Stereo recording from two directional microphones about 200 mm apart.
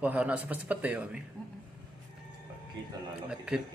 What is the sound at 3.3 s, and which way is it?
Speech, 5° right (ahead or behind).